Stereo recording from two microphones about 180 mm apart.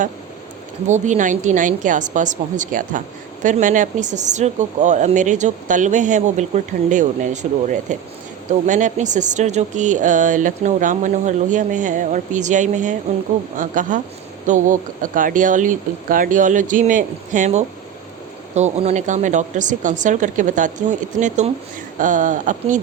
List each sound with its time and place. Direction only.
0.9 s speech: 40° right (ahead or behind)